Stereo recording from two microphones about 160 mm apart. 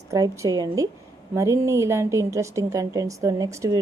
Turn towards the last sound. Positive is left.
turn(degrees=-20)  # may be behind; listen again after turning